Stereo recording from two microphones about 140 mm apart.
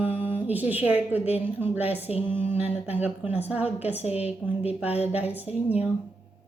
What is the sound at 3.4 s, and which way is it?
Speech, 10° right (ahead or behind).